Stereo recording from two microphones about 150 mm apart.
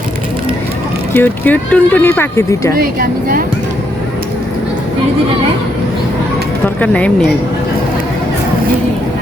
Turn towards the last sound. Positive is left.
turn(degrees=10)  # may be behind; listen again after turning